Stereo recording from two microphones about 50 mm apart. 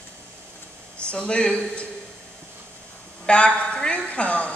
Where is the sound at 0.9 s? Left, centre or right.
Left.